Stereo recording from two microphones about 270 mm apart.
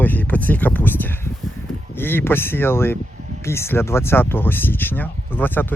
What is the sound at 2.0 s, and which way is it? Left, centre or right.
Speech, centre.